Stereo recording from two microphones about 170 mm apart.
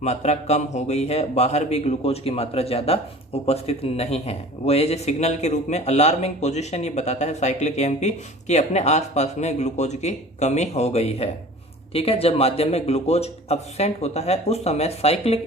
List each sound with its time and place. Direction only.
0.0 s a man's voice: 40° left (ahead or behind)